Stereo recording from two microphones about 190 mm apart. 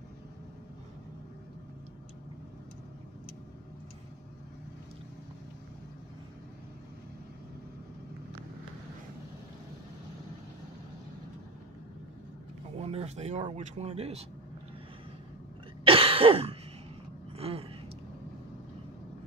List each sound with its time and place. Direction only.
12.7 s speech: 35° right (ahead or behind)
15.8 s cough: 30° right (ahead or behind)
17.4 s a sound: 30° right (ahead or behind)